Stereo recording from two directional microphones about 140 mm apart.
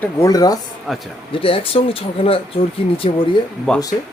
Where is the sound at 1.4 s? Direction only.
40° left (ahead or behind).